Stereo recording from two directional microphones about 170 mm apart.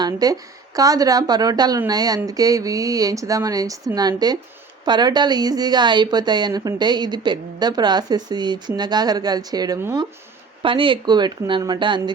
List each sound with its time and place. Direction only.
0.0 s a woman's voice: 20° right (ahead or behind)
10.6 s a woman's voice: 30° right (ahead or behind)